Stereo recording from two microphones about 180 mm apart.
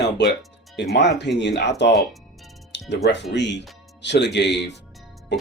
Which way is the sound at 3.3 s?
75° left (ahead or behind).